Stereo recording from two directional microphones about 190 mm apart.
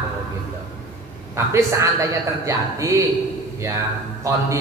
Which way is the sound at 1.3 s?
15° right (ahead or behind).